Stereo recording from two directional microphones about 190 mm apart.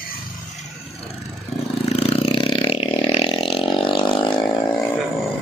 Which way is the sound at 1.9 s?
30° left (ahead or behind).